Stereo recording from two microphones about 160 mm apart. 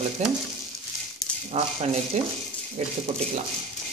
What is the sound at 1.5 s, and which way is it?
Speech, 40° right (ahead or behind).